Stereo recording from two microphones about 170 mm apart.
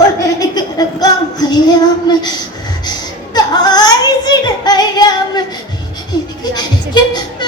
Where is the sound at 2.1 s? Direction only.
25° left (ahead or behind).